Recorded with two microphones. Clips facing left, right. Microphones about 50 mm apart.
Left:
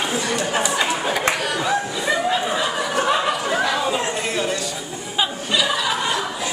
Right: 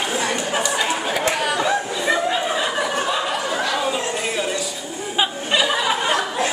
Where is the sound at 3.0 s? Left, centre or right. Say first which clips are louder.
Left 3 dB; left.